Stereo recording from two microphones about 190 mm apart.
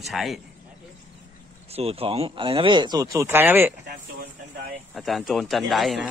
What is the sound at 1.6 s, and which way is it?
Speech, 30° right (ahead or behind).